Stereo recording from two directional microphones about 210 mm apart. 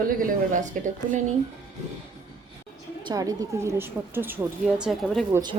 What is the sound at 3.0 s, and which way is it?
A woman's voice, 15° right (ahead or behind).